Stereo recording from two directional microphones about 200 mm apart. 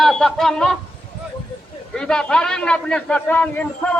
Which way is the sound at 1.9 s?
5° left (ahead or behind).